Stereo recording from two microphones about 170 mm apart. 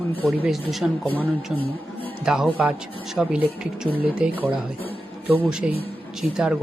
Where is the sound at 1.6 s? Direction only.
30° left (ahead or behind).